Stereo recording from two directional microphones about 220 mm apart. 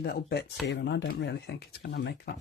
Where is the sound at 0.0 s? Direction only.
45° left (ahead or behind).